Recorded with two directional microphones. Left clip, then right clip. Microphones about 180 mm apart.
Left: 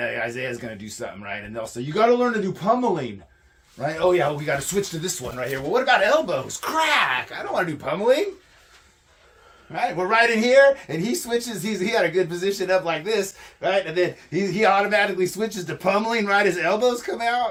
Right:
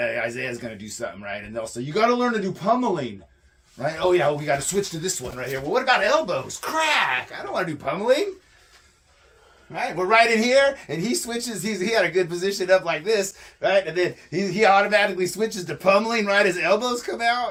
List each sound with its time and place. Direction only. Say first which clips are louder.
0.0 s speech: right 1 dB; centre (ahead or behind)
5.7 s speech: left 1 dB; 20° left (ahead or behind)
9.7 s speech: right 1 dB; 10° left (ahead or behind)